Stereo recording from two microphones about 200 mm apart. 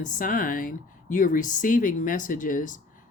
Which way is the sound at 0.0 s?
40° left (ahead or behind).